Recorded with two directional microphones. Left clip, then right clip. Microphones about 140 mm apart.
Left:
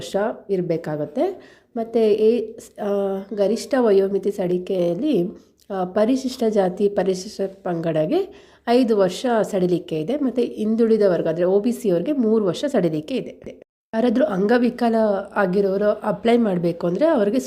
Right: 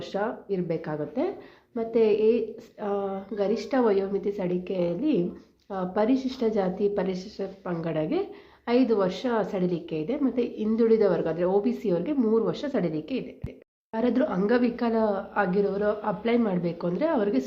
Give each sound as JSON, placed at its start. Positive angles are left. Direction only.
{"t": 0.0, "sound": "a woman's voice", "side_deg": 40}